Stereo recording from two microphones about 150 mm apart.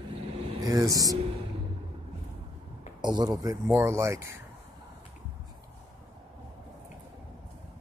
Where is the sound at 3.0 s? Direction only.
30° right (ahead or behind).